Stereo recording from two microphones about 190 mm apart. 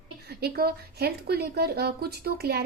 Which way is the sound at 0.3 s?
55° right (ahead or behind).